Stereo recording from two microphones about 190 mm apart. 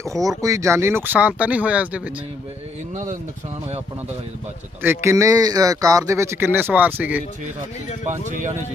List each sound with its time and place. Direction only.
0.0 s speech: 15° right (ahead or behind)
2.9 s speech: 40° right (ahead or behind)
4.8 s speech: 10° right (ahead or behind)
8.3 s speech: 40° right (ahead or behind)